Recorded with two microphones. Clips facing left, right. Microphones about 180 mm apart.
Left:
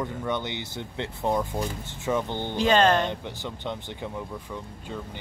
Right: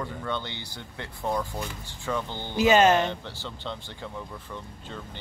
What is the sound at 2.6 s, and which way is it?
Speech, 10° right (ahead or behind).